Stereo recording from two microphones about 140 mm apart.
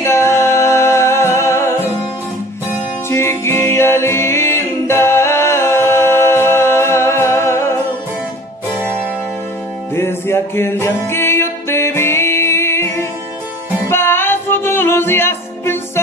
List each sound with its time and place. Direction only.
0.0 s music: 20° left (ahead or behind)
3.1 s music: 20° left (ahead or behind)
9.9 s music: 15° left (ahead or behind)